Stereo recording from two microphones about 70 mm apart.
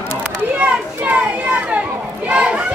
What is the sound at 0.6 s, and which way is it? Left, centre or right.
Children playing, right.